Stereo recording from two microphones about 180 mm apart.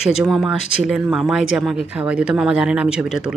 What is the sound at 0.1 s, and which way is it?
A woman's voice, 5° right (ahead or behind).